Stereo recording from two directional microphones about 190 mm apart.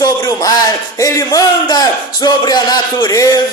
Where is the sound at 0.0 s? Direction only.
20° left (ahead or behind).